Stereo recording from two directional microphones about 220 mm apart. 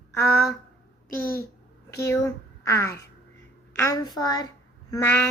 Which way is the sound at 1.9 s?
15° left (ahead or behind).